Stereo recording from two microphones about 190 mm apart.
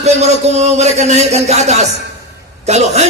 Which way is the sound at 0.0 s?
35° right (ahead or behind).